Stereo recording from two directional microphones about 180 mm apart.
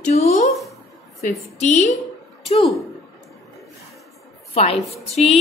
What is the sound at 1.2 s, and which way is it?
Speech, 40° left (ahead or behind).